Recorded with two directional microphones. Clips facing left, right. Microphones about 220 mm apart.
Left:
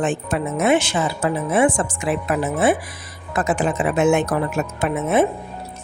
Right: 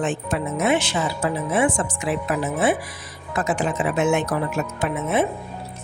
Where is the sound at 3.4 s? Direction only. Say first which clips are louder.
Left 3 dB; 50° left (ahead or behind).